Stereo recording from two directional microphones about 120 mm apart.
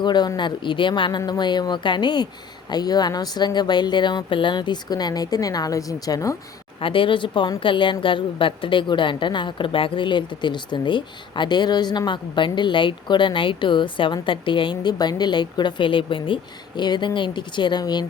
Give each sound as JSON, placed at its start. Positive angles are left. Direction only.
{"t": 0.0, "sound": "a woman's voice", "side_deg": 40}
{"t": 6.7, "sound": "a woman's voice", "side_deg": 45}